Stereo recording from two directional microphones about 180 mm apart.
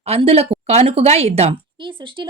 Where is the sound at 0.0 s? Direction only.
35° right (ahead or behind).